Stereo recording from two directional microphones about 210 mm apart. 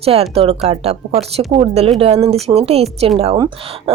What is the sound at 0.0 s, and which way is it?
Speech, 30° right (ahead or behind).